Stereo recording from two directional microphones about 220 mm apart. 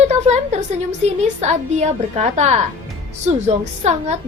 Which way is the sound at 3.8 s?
30° right (ahead or behind).